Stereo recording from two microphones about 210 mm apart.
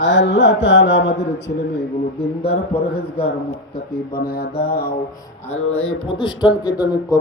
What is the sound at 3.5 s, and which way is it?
Music, 45° left (ahead or behind).